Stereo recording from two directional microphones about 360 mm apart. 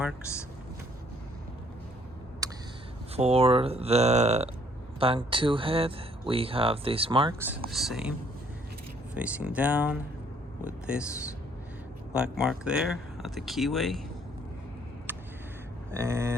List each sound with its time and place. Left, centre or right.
2.4 s a sound: centre
3.2 s speech: centre
9.1 s speech: centre
12.1 s speech: centre
15.1 s a sound: centre
15.9 s speech: centre